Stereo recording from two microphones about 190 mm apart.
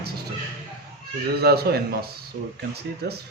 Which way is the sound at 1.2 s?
55° right (ahead or behind).